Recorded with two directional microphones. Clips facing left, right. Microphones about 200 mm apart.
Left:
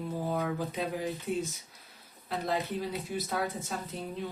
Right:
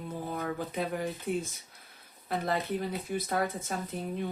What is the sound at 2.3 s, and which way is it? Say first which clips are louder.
Speech: right 1 dB; 55° right (ahead or behind).